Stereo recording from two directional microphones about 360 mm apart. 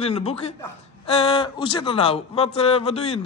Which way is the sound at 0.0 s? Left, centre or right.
Centre.